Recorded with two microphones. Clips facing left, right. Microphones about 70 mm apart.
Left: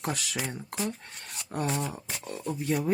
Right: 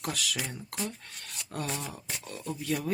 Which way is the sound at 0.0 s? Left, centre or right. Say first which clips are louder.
Left 2 dB; left.